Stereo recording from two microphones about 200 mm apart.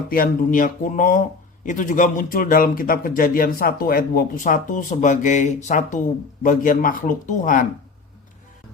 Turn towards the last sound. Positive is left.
turn(degrees=40)  # may be behind; listen again after turning